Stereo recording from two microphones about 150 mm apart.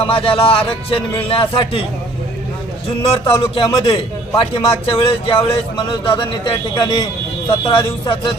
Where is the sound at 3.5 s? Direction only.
35° left (ahead or behind).